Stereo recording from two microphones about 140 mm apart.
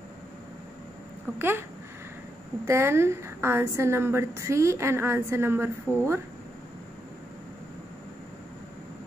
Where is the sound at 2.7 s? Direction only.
20° right (ahead or behind).